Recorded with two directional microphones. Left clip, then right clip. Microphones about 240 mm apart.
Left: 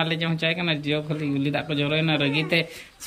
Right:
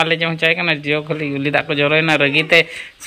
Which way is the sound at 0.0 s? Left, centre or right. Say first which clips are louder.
Right 9 dB; centre.